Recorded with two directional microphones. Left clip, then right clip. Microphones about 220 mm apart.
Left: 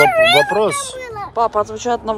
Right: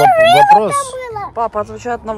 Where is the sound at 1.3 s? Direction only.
Centre (ahead or behind).